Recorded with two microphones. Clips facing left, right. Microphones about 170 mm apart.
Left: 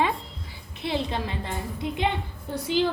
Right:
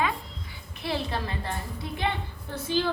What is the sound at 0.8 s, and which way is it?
A woman's voice, 20° left (ahead or behind).